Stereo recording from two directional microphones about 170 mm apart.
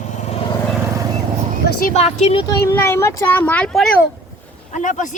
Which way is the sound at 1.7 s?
60° left (ahead or behind).